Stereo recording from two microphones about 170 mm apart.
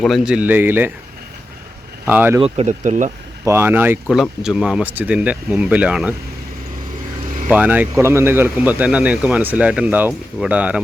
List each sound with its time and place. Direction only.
0.0 s speech: centre (ahead or behind)
2.0 s speech: 10° right (ahead or behind)
2.4 s speech: 40° right (ahead or behind)
3.4 s speech: 15° right (ahead or behind)
7.4 s speech: 10° right (ahead or behind)